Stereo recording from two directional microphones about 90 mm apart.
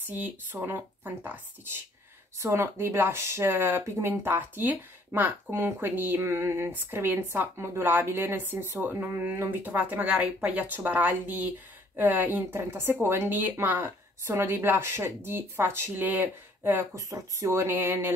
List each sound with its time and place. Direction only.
0.1 s speech: 20° right (ahead or behind)
16.9 s speech: 35° right (ahead or behind)